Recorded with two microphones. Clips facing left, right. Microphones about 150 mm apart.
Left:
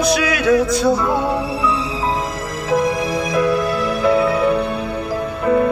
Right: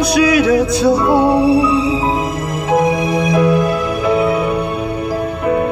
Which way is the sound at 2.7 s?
55° right (ahead or behind).